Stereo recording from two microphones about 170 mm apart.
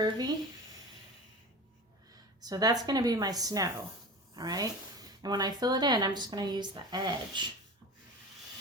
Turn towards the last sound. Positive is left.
turn(degrees=-25)  # may be behind; listen again after turning